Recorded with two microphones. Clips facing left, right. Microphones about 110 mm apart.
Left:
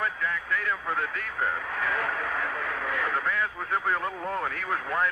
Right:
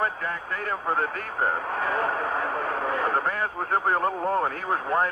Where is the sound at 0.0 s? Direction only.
40° right (ahead or behind).